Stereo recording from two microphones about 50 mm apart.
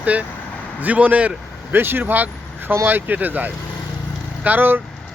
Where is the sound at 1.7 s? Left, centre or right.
Right.